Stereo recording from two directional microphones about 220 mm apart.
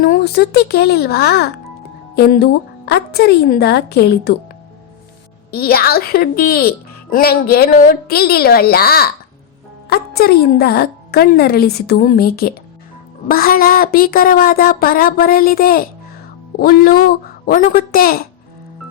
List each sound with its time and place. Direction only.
0.0 s a woman's voice: 45° left (ahead or behind)
5.5 s a woman's voice: 45° left (ahead or behind)